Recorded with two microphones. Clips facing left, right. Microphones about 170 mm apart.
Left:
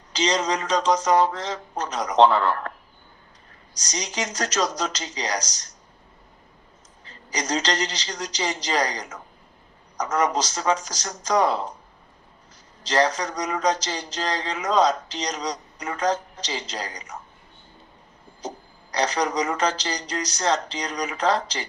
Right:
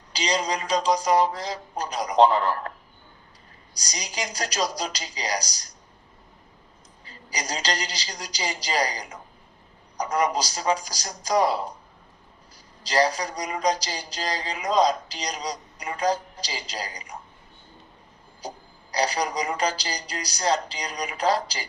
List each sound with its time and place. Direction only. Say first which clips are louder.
0.1 s a man's voice: left 3 dB; 10° right (ahead or behind)
3.8 s a man's voice: left 3 dB; 10° right (ahead or behind)
7.0 s a man's voice: left 4 dB; 10° right (ahead or behind)
12.8 s a man's voice: left 1 dB; 10° right (ahead or behind)
16.0 s a woman's voice: even; 35° right (ahead or behind)
16.4 s a man's voice: left 3 dB; 10° right (ahead or behind)
18.9 s a man's voice: left 2 dB; 10° right (ahead or behind)